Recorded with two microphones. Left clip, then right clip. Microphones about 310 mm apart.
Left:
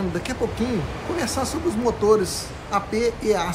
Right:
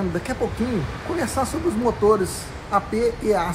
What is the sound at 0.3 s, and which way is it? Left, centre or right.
Speech, centre.